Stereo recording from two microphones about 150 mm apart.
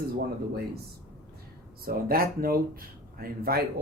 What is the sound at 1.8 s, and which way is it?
Speech, 80° right.